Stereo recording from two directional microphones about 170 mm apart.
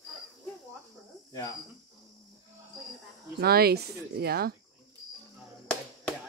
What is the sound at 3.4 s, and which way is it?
Speech, 65° right (ahead or behind).